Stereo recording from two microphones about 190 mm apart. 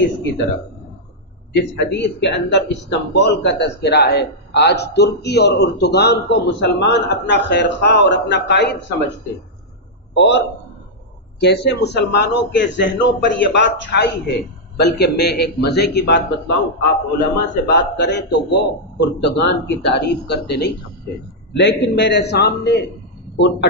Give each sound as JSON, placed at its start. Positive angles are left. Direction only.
{"t": 1.5, "sound": "speech", "side_deg": 65}
{"t": 10.1, "sound": "a man's voice", "side_deg": 70}
{"t": 17.6, "sound": "speech", "side_deg": 65}